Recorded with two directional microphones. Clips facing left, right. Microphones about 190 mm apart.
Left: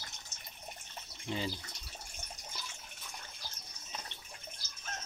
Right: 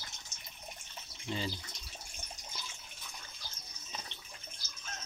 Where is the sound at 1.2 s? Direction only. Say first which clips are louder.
Left 1 dB; 15° left (ahead or behind).